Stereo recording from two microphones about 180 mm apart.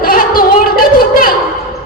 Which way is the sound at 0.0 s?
55° left (ahead or behind).